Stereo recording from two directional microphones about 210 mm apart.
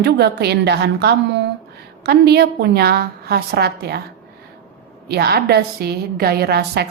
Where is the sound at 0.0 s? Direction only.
50° right (ahead or behind).